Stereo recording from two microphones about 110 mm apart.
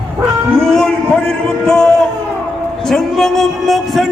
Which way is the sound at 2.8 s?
5° left (ahead or behind).